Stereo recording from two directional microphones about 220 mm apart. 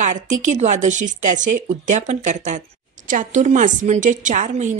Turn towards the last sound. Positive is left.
turn(degrees=-35)  # may be behind; listen again after turning